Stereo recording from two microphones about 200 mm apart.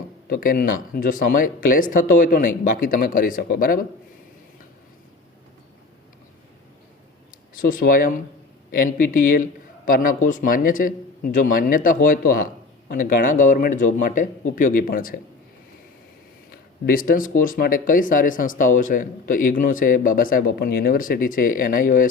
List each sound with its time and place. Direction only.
0.3 s speech: 45° left (ahead or behind)
7.6 s a man's voice: 45° left (ahead or behind)
16.5 s speech: 45° left (ahead or behind)